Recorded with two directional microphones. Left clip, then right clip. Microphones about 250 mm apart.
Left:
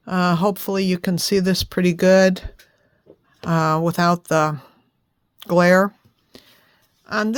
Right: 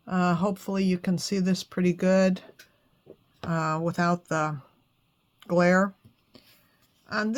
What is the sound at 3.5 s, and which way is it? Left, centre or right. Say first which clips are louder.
Speech: left 9 dB; left.